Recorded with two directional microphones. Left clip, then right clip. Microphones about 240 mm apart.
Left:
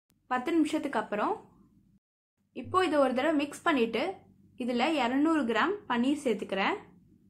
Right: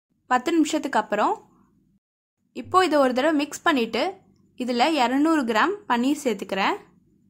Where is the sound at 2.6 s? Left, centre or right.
Right.